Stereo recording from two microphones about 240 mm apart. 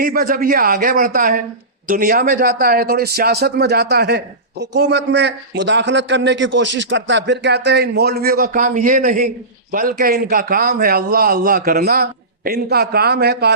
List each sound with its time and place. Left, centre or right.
0.0 s a man's voice: right